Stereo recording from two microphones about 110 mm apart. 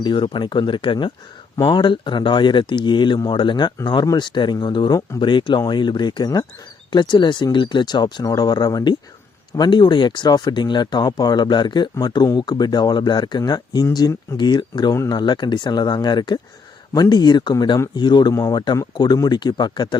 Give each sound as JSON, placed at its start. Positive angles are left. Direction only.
{"t": 0.0, "sound": "speech", "side_deg": 45}
{"t": 1.5, "sound": "speech", "side_deg": 40}